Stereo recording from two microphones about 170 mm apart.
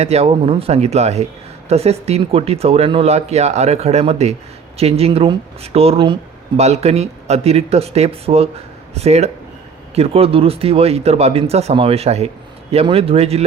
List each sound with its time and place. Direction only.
0.0 s speech: 40° right (ahead or behind)